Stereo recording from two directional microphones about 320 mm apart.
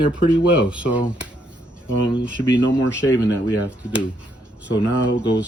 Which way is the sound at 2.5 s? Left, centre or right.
Left.